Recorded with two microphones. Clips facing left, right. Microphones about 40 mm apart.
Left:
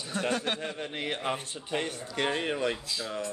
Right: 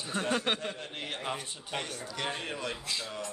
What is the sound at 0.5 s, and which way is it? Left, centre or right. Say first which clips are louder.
A man's voice: left 3 dB; left.